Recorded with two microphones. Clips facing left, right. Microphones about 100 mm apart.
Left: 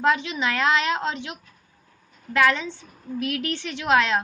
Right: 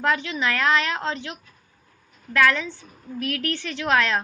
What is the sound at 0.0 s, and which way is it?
A woman's voice, 20° left (ahead or behind).